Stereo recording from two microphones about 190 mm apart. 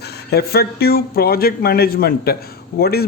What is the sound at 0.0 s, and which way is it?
A man's voice, 60° left (ahead or behind).